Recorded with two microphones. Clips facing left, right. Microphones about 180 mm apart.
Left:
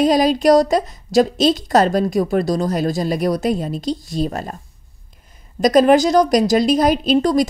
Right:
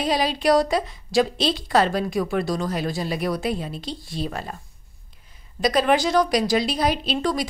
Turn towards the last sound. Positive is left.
turn(degrees=45)  # may be behind; listen again after turning